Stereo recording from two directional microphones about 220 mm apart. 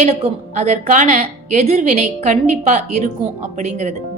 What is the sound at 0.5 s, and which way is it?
A woman's voice, 35° right (ahead or behind).